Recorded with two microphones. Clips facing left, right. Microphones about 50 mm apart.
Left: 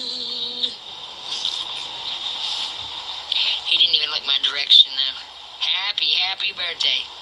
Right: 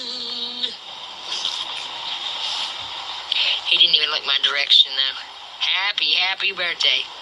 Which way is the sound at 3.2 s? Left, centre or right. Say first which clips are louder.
Right 2 dB; right.